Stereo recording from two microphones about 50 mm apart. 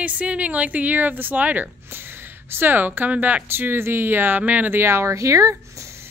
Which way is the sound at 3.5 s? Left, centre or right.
Right.